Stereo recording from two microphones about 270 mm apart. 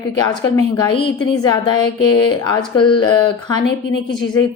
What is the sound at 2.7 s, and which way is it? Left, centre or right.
Speech, centre.